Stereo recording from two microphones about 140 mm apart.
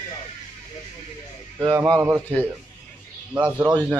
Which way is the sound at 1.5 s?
25° right (ahead or behind).